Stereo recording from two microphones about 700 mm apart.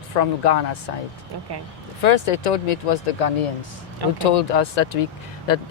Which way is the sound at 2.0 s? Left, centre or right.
Left.